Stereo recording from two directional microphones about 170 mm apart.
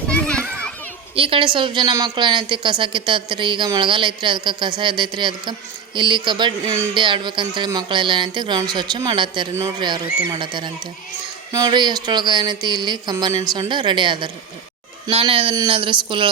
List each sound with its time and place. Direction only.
0.1 s children playing: 5° left (ahead or behind)
1.1 s a woman's voice: 30° right (ahead or behind)